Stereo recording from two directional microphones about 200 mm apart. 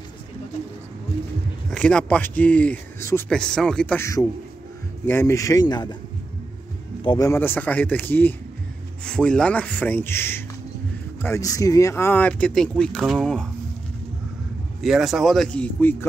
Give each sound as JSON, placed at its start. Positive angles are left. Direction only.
{"t": 1.7, "sound": "speech", "side_deg": 5}
{"t": 7.0, "sound": "speech", "side_deg": 20}
{"t": 14.8, "sound": "speech", "side_deg": 0}